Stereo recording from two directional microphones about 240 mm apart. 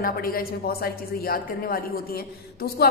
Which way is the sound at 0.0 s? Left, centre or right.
Left.